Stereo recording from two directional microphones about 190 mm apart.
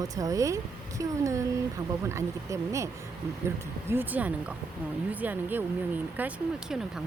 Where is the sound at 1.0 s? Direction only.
15° right (ahead or behind).